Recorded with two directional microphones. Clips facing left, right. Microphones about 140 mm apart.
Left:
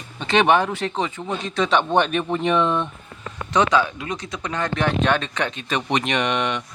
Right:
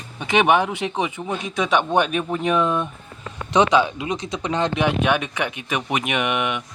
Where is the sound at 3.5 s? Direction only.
20° right (ahead or behind).